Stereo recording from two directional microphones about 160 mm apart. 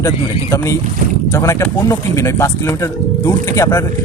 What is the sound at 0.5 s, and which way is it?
A man's voice, 20° left (ahead or behind).